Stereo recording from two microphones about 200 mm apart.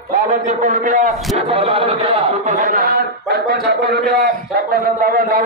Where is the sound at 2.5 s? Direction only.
45° right (ahead or behind).